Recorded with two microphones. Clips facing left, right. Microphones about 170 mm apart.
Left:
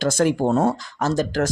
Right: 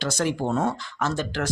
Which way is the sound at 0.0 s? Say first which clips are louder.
Left 6 dB; 50° left (ahead or behind).